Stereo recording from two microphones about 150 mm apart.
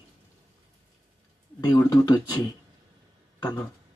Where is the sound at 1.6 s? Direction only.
25° left (ahead or behind).